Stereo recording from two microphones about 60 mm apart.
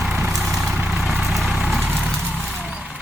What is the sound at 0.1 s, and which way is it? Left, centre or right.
Vehicle, centre.